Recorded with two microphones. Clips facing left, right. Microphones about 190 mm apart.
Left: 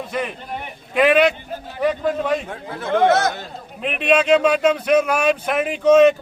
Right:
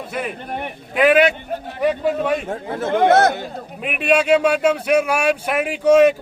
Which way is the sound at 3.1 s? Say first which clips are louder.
Right 4 dB; 60° right (ahead or behind).